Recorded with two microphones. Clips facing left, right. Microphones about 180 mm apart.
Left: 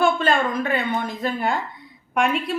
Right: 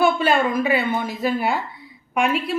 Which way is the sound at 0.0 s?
10° right (ahead or behind).